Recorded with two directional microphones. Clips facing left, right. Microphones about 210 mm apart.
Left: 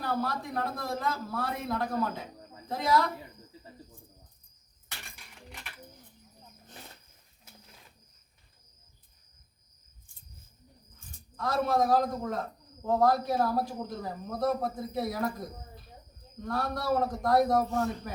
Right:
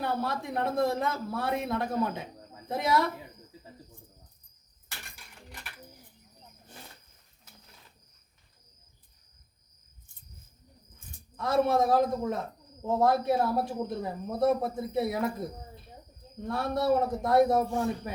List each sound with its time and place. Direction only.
0.0 s a man's voice: 25° right (ahead or behind)
11.3 s a man's voice: 25° right (ahead or behind)